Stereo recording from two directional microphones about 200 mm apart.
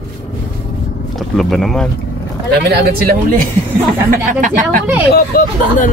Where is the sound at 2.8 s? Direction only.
45° right (ahead or behind).